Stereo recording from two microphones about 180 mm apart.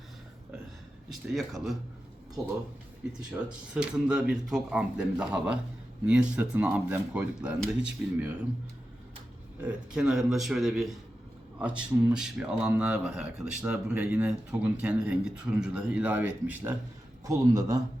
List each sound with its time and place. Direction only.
1.1 s speech: centre (ahead or behind)
3.1 s speech: 5° right (ahead or behind)
9.6 s speech: 5° right (ahead or behind)